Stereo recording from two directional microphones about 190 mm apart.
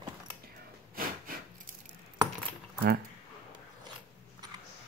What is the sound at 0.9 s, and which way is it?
Wood, 50° right (ahead or behind).